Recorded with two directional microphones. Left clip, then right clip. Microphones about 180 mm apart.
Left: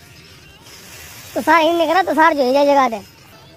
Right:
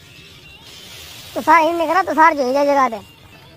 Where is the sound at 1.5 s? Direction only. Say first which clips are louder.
Even; 45° left (ahead or behind).